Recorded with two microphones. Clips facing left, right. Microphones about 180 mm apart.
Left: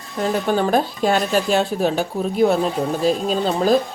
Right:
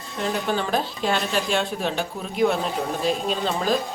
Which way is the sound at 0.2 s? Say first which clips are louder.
Left 6 dB; 45° left (ahead or behind).